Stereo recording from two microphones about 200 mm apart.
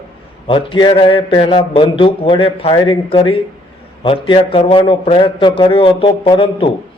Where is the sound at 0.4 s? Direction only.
25° left (ahead or behind).